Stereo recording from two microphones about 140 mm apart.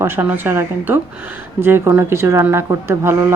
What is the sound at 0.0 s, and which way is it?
Speech, 15° right (ahead or behind).